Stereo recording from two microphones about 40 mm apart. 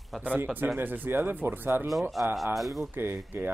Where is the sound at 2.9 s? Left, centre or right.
Right.